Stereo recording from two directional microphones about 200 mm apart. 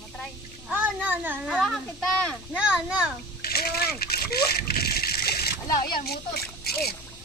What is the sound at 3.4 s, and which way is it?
Splash, 50° left (ahead or behind).